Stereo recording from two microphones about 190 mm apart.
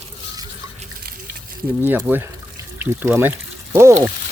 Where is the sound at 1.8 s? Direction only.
10° right (ahead or behind).